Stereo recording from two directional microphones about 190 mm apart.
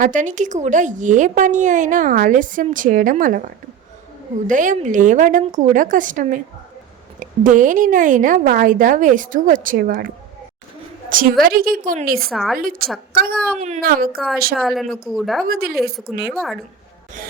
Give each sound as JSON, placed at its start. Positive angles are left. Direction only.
{"t": 0.0, "sound": "a woman's voice", "side_deg": -40}
{"t": 11.1, "sound": "a woman's voice", "side_deg": -50}
{"t": 12.3, "sound": "a woman's voice", "side_deg": 0}
{"t": 12.5, "sound": "a woman's voice", "side_deg": -50}
{"t": 14.5, "sound": "a woman's voice", "side_deg": 0}
{"t": 15.4, "sound": "a woman's voice", "side_deg": -50}
{"t": 15.7, "sound": "a woman's voice", "side_deg": 0}